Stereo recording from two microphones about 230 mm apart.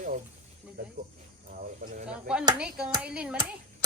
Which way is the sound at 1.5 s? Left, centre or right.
Right.